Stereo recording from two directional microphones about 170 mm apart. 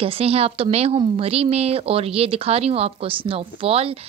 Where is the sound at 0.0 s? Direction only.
35° right (ahead or behind).